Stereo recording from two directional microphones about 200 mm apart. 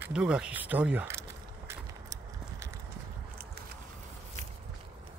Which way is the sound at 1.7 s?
15° right (ahead or behind).